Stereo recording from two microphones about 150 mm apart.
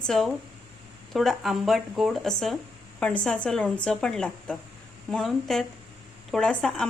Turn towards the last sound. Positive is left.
turn(degrees=5)  # may be behind; listen again after turning